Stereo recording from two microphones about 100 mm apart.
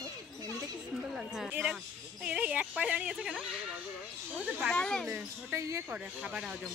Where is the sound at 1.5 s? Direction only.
15° right (ahead or behind).